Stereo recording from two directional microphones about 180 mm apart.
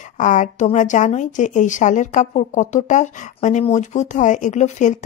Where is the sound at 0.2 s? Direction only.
45° left (ahead or behind).